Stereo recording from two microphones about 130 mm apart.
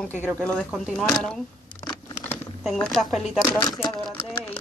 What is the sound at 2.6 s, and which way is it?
Speech, 5° left (ahead or behind).